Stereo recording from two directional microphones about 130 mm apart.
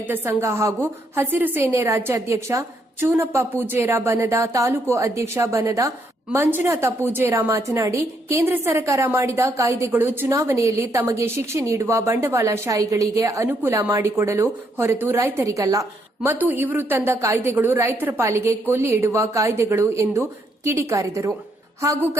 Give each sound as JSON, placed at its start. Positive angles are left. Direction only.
{"t": 0.1, "sound": "a woman's voice", "side_deg": -15}